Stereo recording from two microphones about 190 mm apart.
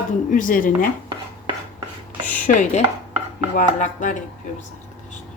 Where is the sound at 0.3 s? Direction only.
45° left (ahead or behind).